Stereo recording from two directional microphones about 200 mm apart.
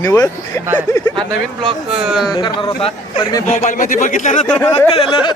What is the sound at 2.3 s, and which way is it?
A man's voice, 20° left (ahead or behind).